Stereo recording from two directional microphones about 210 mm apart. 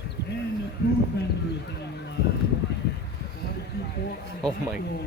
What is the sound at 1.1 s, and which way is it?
Speech, 55° left (ahead or behind).